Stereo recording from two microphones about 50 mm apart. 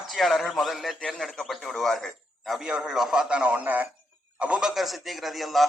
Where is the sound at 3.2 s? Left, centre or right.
Right.